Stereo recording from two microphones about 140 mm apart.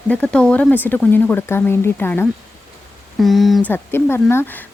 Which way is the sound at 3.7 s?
15° left (ahead or behind).